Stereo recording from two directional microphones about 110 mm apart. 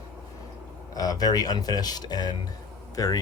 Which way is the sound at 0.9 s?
35° left (ahead or behind).